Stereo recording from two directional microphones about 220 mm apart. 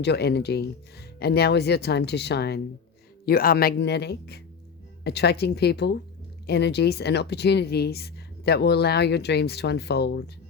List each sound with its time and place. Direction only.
0.0 s speech: 50° left (ahead or behind)